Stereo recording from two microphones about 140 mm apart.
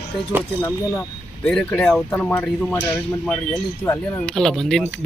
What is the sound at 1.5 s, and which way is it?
Speech, 5° left (ahead or behind).